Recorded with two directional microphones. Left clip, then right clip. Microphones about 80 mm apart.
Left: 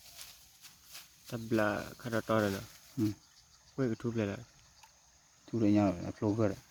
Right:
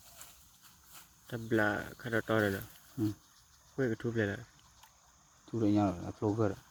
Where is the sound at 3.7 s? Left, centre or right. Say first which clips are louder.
Right 1 dB; left.